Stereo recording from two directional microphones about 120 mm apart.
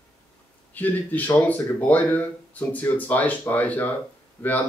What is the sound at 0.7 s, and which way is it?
Speech, 15° left (ahead or behind).